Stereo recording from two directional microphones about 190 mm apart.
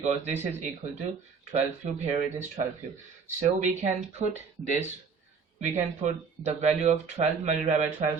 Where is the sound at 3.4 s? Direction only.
35° right (ahead or behind).